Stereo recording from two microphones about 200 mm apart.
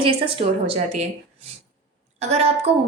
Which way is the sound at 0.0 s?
25° right (ahead or behind).